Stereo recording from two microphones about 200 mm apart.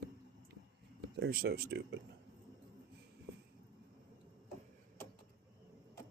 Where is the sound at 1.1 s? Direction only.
55° right (ahead or behind).